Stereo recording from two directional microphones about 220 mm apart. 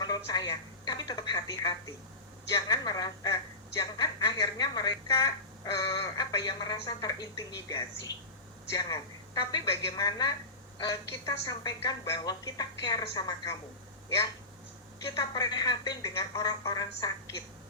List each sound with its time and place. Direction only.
0.0 s a woman's voice: 15° left (ahead or behind)
15.0 s a woman's voice: 15° left (ahead or behind)